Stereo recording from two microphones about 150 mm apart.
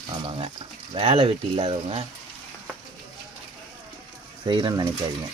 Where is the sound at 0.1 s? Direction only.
35° right (ahead or behind).